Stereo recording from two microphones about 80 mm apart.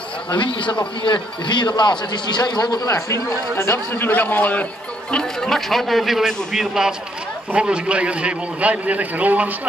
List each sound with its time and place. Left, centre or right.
0.3 s a man's voice: left
3.1 s a man's voice: left; by 4.6 s centre
5.1 s a man's voice: centre